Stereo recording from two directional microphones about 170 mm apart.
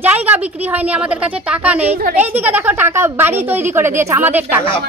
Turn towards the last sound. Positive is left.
turn(degrees=-10)  # may be behind; listen again after turning